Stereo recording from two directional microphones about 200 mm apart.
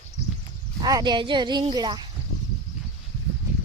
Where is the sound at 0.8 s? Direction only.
20° right (ahead or behind).